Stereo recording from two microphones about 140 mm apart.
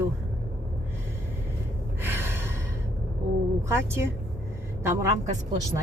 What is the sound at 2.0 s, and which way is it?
Gasp, 15° right (ahead or behind).